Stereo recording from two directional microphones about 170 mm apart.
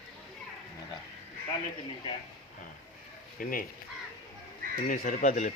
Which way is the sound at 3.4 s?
55° left (ahead or behind).